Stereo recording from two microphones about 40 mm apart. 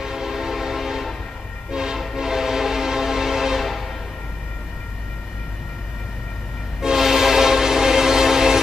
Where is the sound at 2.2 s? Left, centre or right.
Centre.